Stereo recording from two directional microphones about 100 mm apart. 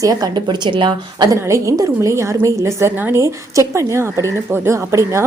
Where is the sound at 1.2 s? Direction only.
30° right (ahead or behind).